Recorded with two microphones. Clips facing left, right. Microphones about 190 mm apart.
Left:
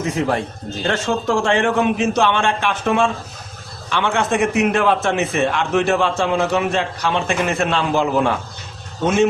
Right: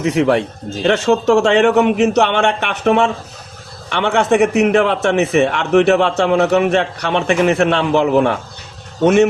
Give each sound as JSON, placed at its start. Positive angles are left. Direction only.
{"t": 0.0, "sound": "a man's voice", "side_deg": -70}